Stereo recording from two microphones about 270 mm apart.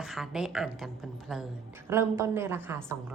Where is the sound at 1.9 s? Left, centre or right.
Centre.